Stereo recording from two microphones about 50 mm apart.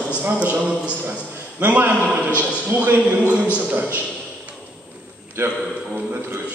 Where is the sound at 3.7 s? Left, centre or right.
Right.